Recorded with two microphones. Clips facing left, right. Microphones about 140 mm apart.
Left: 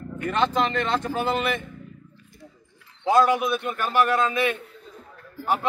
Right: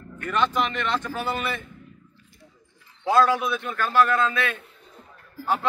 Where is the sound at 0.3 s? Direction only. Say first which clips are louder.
Left 1 dB; 30° left (ahead or behind).